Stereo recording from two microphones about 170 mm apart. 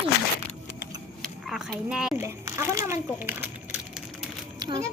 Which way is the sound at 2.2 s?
15° right (ahead or behind).